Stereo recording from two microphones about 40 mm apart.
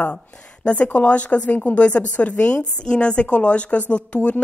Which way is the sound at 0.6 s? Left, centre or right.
Left.